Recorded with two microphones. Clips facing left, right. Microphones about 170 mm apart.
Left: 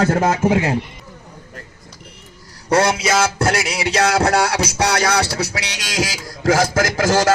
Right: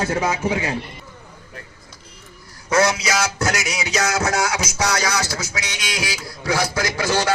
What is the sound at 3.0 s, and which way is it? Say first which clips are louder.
Music: left 5 dB; 30° left (ahead or behind).